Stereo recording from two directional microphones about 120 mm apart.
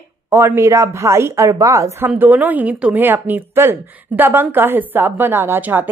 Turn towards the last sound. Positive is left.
turn(degrees=-15)  # may be behind; listen again after turning